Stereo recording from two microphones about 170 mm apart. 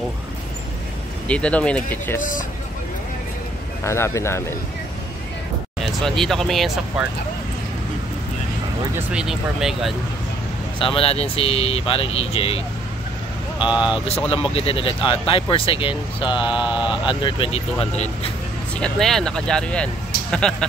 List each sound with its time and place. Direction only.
1.2 s speech: 5° left (ahead or behind)
2.1 s speech: 50° left (ahead or behind)
3.8 s speech: 15° left (ahead or behind)
5.8 s speech: centre (ahead or behind)
8.9 s speech: 5° right (ahead or behind)
10.8 s speech: 35° left (ahead or behind)
13.7 s speech: 5° right (ahead or behind)
14.3 s speech: 35° left (ahead or behind)
17.9 s speech: 40° left (ahead or behind)
18.8 s speech: centre (ahead or behind)